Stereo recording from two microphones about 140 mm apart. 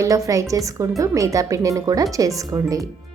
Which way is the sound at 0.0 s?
25° right (ahead or behind).